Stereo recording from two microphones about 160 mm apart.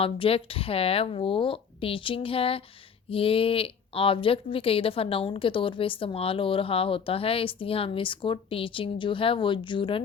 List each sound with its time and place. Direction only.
0.0 s a woman's voice: 35° left (ahead or behind)